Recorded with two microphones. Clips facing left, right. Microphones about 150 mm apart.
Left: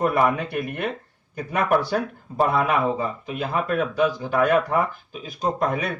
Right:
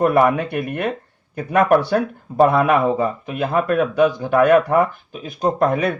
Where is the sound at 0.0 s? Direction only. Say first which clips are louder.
Right 5 dB; 60° right (ahead or behind).